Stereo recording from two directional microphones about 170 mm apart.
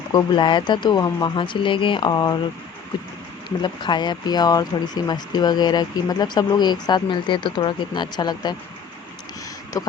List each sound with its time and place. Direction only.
0.1 s speech: 25° left (ahead or behind)
3.6 s speech: 25° left (ahead or behind)
9.7 s speech: 20° left (ahead or behind)